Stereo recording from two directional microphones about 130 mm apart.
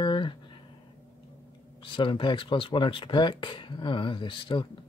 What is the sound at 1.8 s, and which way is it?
Speech, 40° left (ahead or behind).